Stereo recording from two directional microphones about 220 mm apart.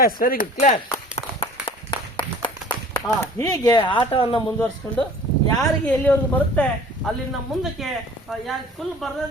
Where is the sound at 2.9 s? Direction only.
15° left (ahead or behind).